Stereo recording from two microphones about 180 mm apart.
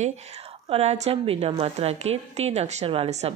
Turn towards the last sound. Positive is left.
turn(degrees=-35)  # may be behind; listen again after turning